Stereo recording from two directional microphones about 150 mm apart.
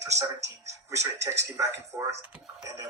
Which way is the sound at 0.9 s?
20° right (ahead or behind).